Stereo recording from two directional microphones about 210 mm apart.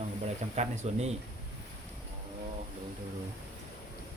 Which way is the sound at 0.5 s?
35° right (ahead or behind).